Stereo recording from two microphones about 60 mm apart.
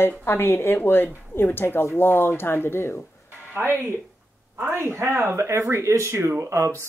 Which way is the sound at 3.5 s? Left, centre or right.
Right.